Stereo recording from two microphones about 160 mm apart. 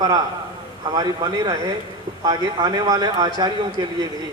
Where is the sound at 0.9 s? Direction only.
25° right (ahead or behind).